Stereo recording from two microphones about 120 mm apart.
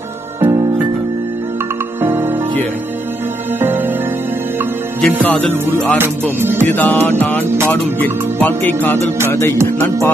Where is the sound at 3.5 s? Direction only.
15° right (ahead or behind).